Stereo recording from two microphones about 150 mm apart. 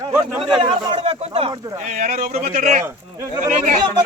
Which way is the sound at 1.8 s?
50° right (ahead or behind).